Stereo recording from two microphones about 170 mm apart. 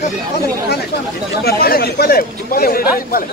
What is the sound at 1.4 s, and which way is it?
Speech, 65° left (ahead or behind).